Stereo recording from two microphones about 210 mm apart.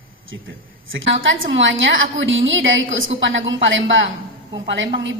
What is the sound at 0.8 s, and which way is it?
A woman's voice, 65° right (ahead or behind).